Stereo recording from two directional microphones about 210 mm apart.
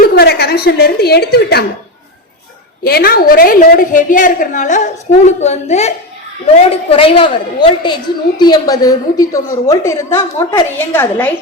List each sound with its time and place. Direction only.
0.0 s a woman's voice: 50° left (ahead or behind)
2.8 s a woman's voice: 45° left (ahead or behind); by 11.3 s 10° left (ahead or behind)